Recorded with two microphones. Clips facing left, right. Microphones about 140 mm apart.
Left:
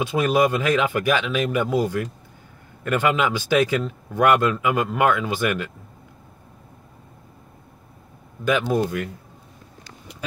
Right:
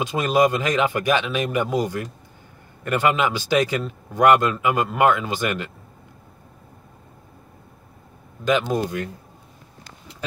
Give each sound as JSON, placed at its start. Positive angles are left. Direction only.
{"t": 0.0, "sound": "a man's voice", "side_deg": -15}
{"t": 8.5, "sound": "speech", "side_deg": -20}